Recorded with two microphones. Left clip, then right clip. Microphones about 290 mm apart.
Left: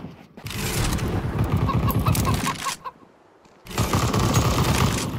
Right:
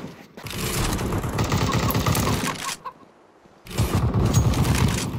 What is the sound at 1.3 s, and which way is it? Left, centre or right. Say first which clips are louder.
Vehicle: right 3 dB; right.